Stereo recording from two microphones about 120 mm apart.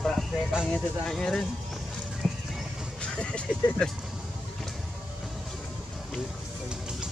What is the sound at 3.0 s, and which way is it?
Speech, 10° left (ahead or behind).